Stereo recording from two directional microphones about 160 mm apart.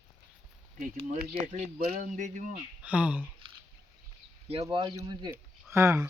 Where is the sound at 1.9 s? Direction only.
50° right (ahead or behind).